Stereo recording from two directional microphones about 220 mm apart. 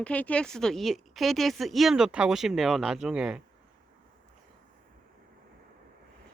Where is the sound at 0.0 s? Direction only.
5° left (ahead or behind).